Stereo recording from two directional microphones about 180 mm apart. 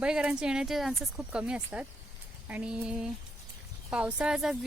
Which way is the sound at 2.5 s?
5° right (ahead or behind).